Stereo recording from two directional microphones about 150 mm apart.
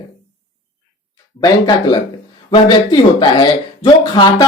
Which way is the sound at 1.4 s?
25° left (ahead or behind).